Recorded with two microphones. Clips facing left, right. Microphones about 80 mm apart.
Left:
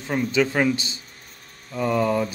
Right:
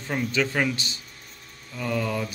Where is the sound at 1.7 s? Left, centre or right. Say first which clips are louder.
Left 6 dB; left.